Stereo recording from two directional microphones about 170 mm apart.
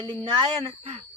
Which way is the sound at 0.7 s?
40° right (ahead or behind).